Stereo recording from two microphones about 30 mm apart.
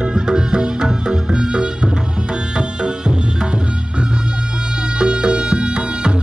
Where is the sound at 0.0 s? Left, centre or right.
Right.